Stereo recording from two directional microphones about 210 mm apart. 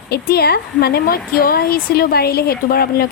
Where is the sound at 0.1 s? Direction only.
50° left (ahead or behind).